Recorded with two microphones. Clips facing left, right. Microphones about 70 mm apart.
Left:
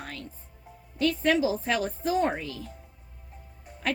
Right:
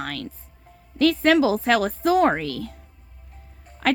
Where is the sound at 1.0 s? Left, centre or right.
Right.